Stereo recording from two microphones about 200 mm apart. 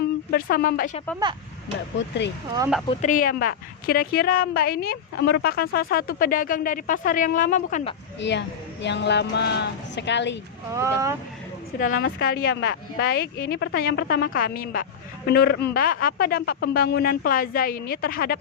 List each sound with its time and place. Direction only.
0.3 s a woman's voice: 45° left (ahead or behind)
2.0 s a woman's voice: 60° left (ahead or behind)
3.0 s a woman's voice: 45° left (ahead or behind)
8.2 s a woman's voice: 60° left (ahead or behind)
10.7 s speech: 15° right (ahead or behind)
11.8 s a woman's voice: 45° left (ahead or behind)